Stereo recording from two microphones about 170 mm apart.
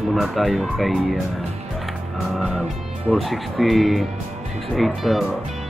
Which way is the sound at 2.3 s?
Centre (ahead or behind).